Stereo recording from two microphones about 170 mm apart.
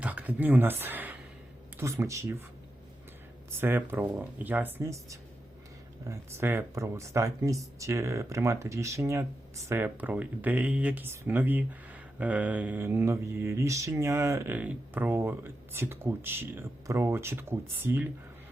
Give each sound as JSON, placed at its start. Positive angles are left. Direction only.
{"t": 0.0, "sound": "speech", "side_deg": -10}
{"t": 3.6, "sound": "speech", "side_deg": -10}